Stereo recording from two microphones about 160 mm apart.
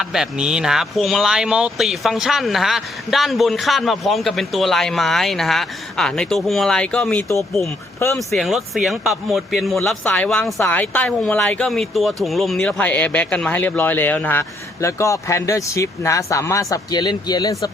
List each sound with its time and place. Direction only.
0.0 s speech: 5° right (ahead or behind)
7.9 s speech: 15° left (ahead or behind)
8.3 s speech: centre (ahead or behind); by 17.7 s 20° left (ahead or behind)